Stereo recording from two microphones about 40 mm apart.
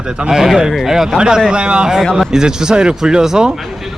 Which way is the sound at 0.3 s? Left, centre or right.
Centre.